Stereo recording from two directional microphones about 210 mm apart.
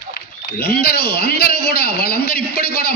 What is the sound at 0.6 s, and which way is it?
A man's voice, 50° left (ahead or behind).